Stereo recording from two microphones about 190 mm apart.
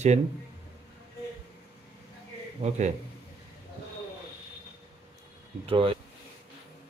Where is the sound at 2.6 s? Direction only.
35° right (ahead or behind).